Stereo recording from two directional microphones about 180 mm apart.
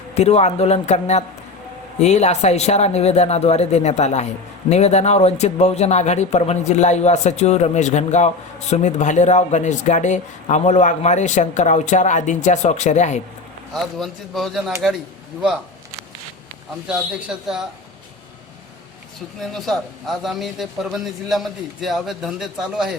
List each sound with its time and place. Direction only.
0.1 s speech: 35° left (ahead or behind)
13.7 s a man's voice: centre (ahead or behind)
16.9 s a man's voice: 5° right (ahead or behind)
19.4 s a man's voice: centre (ahead or behind)